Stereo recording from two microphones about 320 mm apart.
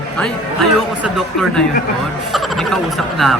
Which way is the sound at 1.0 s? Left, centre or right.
Centre.